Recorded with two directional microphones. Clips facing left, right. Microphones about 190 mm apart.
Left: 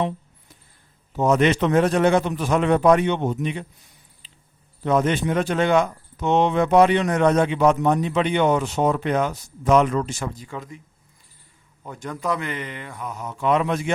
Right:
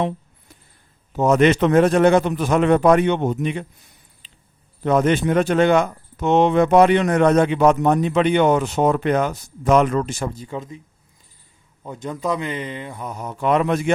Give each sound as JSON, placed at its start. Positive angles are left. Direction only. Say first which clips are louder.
{"t": 1.1, "sound": "speech", "louder": "right 3 dB", "side_deg": -50}
{"t": 4.8, "sound": "speech", "louder": "right 3 dB", "side_deg": -60}
{"t": 10.2, "sound": "speech", "louder": "right 4 dB", "side_deg": -30}
{"t": 11.8, "sound": "speech", "louder": "right 3 dB", "side_deg": -20}
{"t": 13.1, "sound": "speech", "louder": "even", "side_deg": -35}
{"t": 13.4, "sound": "speech", "louder": "right 3 dB", "side_deg": -55}